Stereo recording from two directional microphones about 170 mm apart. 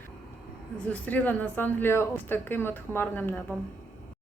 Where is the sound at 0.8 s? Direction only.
5° left (ahead or behind).